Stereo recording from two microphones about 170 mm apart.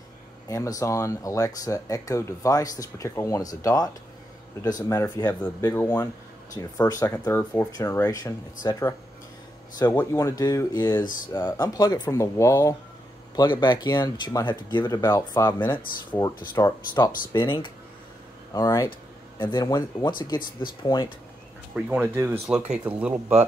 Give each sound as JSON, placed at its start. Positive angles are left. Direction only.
{"t": 0.5, "sound": "speech", "side_deg": 20}
{"t": 9.9, "sound": "speech", "side_deg": 20}
{"t": 21.7, "sound": "speech", "side_deg": -10}